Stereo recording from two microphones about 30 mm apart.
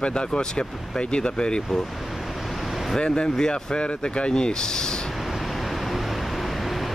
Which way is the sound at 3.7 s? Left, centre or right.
Left.